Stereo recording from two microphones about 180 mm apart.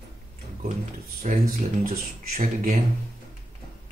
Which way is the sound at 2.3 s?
40° right (ahead or behind).